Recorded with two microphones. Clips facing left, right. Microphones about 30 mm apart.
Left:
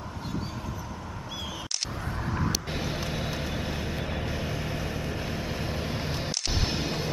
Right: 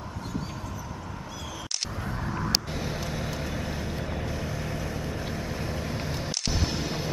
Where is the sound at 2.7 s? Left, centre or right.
Centre.